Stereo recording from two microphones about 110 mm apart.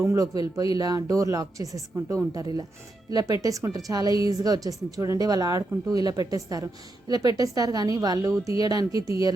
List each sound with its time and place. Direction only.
0.0 s speech: 30° right (ahead or behind)